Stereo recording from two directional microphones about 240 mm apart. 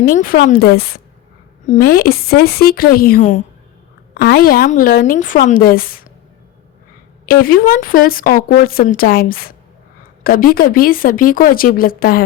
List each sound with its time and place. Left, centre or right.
0.0 s speech: left
7.3 s speech: left